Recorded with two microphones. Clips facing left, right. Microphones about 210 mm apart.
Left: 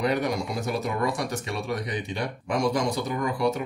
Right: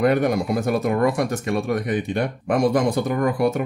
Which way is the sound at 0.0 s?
55° right (ahead or behind).